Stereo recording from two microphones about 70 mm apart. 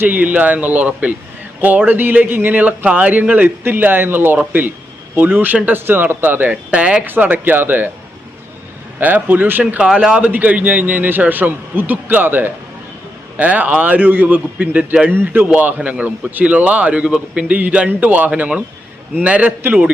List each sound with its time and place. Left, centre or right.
0.0 s a man's voice: right
6.7 s a man's voice: centre
9.0 s a man's voice: right
9.8 s a man's voice: centre; by 15.4 s right
15.4 s a man's voice: centre